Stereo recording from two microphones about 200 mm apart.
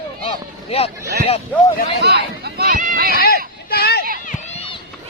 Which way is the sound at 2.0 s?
55° right (ahead or behind).